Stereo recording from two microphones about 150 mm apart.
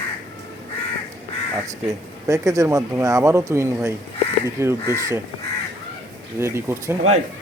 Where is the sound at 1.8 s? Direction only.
20° right (ahead or behind).